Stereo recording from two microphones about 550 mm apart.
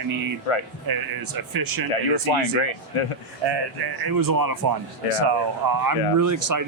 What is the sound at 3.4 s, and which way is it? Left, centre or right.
Speech, right.